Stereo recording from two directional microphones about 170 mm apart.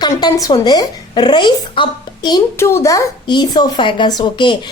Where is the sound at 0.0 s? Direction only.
20° left (ahead or behind).